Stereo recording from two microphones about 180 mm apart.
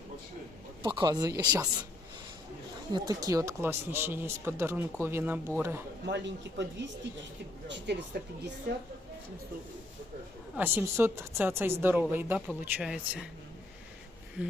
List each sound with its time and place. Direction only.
0.8 s speech: 25° right (ahead or behind)
2.9 s speech: 20° right (ahead or behind)
6.1 s speech: 75° right (ahead or behind)
10.5 s speech: 10° right (ahead or behind)